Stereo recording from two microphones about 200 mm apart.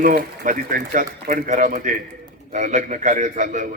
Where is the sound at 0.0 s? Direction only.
40° right (ahead or behind).